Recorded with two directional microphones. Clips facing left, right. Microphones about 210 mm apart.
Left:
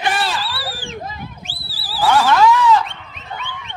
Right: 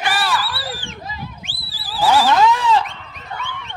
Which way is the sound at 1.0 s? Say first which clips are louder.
Left 2 dB; 50° left (ahead or behind).